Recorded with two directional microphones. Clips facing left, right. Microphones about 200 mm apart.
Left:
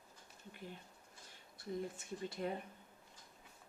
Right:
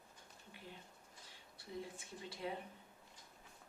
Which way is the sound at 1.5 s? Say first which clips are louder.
Left 5 dB; 45° left (ahead or behind).